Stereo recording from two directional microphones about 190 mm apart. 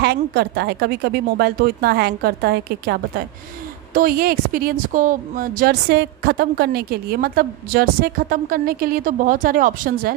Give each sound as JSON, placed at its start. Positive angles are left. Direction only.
{"t": 0.0, "sound": "a woman's voice", "side_deg": -60}